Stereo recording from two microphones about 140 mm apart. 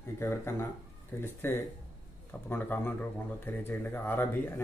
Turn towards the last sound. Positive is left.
turn(degrees=15)  # may be behind; listen again after turning